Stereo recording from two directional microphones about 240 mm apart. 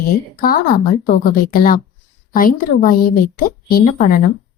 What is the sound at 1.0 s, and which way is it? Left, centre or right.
Speech, left.